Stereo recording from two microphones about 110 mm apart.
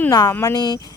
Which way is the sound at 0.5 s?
40° left (ahead or behind).